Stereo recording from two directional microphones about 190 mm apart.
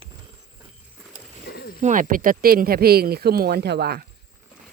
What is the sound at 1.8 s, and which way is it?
Speech, 40° right (ahead or behind).